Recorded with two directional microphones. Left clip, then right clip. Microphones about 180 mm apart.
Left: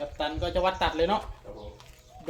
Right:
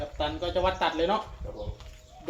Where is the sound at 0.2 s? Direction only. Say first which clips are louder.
Even; 70° left (ahead or behind).